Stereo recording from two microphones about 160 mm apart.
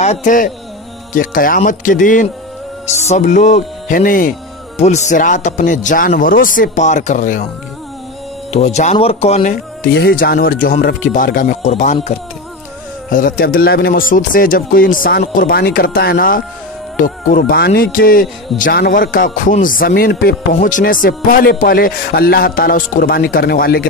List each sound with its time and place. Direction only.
0.0 s speech: 45° left (ahead or behind)
4.7 s speech: 45° left (ahead or behind)
8.5 s speech: 40° left (ahead or behind)
9.9 s speech: 70° left (ahead or behind); by 12.2 s 45° left (ahead or behind)
13.1 s speech: 65° left (ahead or behind)
20.6 s speech: 60° left (ahead or behind)